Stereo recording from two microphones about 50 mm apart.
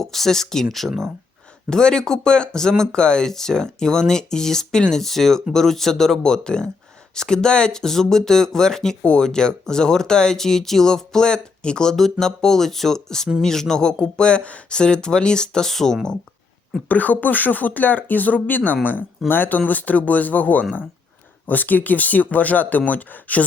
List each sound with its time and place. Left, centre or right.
0.0 s speech: centre
1.7 s speech: centre
16.9 s speech: left